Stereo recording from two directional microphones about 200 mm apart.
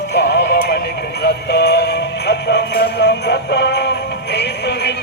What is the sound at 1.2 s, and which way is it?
Music, 55° left (ahead or behind).